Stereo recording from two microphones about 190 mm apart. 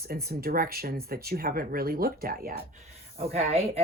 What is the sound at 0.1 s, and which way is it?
Speech, 55° right (ahead or behind).